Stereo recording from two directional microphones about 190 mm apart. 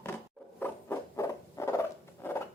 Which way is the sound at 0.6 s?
15° left (ahead or behind).